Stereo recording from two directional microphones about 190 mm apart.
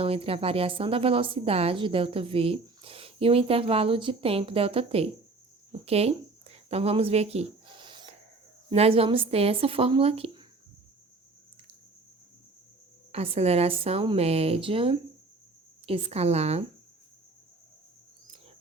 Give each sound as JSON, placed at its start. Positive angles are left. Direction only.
{"t": 0.0, "sound": "a woman's voice", "side_deg": -30}
{"t": 5.8, "sound": "a sound", "side_deg": -30}
{"t": 8.7, "sound": "speech", "side_deg": -30}
{"t": 13.1, "sound": "speech", "side_deg": -30}